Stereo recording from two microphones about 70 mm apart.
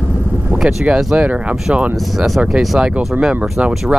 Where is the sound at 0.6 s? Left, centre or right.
Centre.